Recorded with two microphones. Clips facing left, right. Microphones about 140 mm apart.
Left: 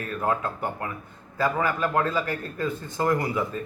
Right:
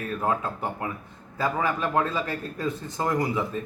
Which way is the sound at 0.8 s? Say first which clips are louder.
Right 1 dB; 20° right (ahead or behind).